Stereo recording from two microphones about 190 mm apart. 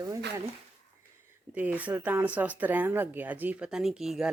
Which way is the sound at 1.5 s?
10° right (ahead or behind).